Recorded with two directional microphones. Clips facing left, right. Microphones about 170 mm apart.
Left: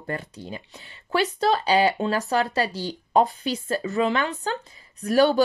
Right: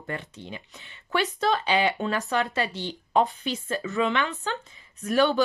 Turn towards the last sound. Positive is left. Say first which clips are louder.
# left 3 dB
turn(degrees=35)  # may be behind; listen again after turning